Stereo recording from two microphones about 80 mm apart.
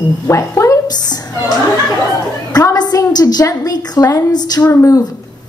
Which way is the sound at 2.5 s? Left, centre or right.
Left.